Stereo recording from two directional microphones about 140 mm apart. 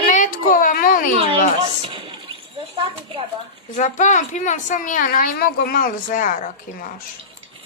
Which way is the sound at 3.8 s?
60° left (ahead or behind).